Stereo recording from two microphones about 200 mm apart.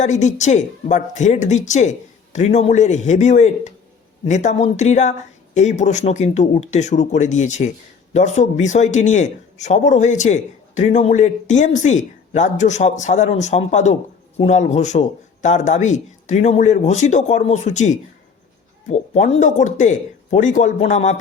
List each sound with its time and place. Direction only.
0.0 s speech: 35° left (ahead or behind)